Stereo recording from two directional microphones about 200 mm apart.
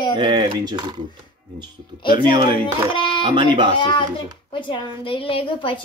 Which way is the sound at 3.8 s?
25° left (ahead or behind).